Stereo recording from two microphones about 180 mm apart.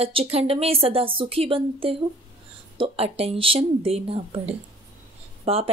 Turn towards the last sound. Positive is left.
turn(degrees=-35)  # may be behind; listen again after turning